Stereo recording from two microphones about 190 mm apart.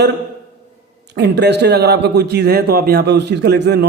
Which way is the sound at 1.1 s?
65° right (ahead or behind).